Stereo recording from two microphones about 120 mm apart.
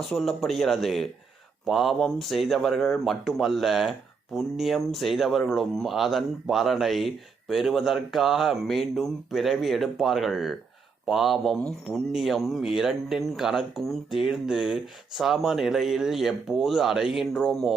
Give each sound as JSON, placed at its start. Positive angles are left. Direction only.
{"t": 0.1, "sound": "speech", "side_deg": 0}